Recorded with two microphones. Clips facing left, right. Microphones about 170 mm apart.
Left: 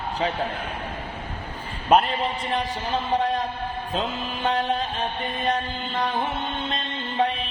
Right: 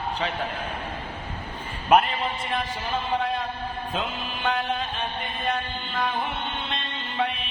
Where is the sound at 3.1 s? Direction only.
40° left (ahead or behind).